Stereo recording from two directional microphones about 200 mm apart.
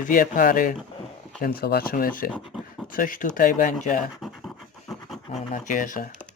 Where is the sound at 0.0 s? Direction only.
45° left (ahead or behind).